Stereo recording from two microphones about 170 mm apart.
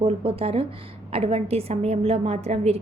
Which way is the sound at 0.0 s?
35° right (ahead or behind).